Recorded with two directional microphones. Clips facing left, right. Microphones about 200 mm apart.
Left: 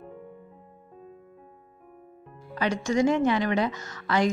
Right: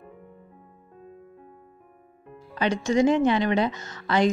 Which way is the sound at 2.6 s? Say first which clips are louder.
Right 2 dB; 25° right (ahead or behind).